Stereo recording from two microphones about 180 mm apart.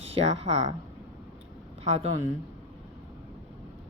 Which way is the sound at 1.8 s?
35° right (ahead or behind).